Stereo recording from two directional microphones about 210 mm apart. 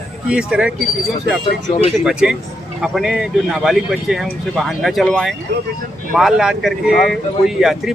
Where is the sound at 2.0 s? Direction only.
5° right (ahead or behind).